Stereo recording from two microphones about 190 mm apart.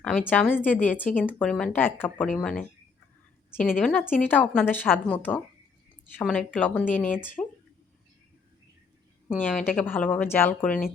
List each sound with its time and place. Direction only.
0.3 s a woman's voice: 10° left (ahead or behind)
9.5 s a woman's voice: 5° left (ahead or behind)